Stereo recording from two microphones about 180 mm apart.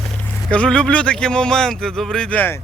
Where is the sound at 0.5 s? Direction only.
5° left (ahead or behind).